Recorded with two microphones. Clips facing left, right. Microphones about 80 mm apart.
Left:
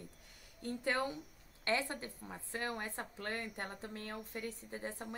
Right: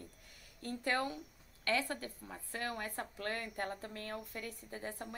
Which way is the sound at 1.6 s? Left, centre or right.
Left.